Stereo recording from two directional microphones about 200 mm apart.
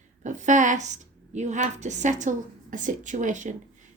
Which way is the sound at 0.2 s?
40° right (ahead or behind).